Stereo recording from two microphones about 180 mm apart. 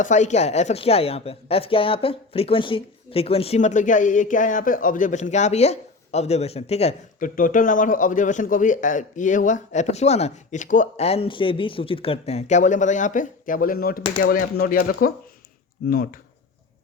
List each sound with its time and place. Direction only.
0.0 s a woman's voice: 40° left (ahead or behind)
7.3 s a man's voice: 50° left (ahead or behind)
15.9 s speech: 55° left (ahead or behind)